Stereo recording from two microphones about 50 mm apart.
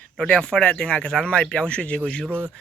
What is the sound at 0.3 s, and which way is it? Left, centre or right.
Speech, centre.